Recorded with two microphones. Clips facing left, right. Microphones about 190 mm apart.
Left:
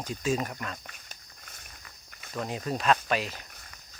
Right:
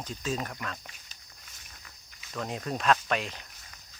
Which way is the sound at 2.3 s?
5° left (ahead or behind).